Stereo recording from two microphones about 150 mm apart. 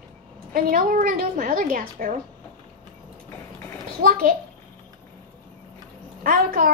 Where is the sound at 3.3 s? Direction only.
15° left (ahead or behind).